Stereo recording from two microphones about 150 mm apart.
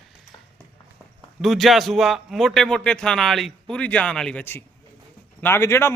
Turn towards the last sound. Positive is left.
turn(degrees=15)  # may be behind; listen again after turning